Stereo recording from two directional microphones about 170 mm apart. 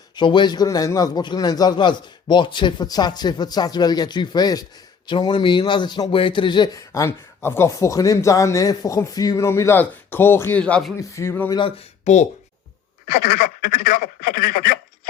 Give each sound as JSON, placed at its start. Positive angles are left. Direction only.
{"t": 0.2, "sound": "a man's voice", "side_deg": 25}
{"t": 10.9, "sound": "speech", "side_deg": 15}
{"t": 11.5, "sound": "speech", "side_deg": 35}
{"t": 13.3, "sound": "speech", "side_deg": 60}